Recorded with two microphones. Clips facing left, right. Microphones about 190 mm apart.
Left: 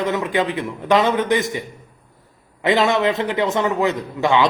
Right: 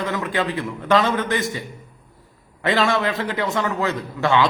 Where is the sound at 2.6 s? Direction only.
20° left (ahead or behind).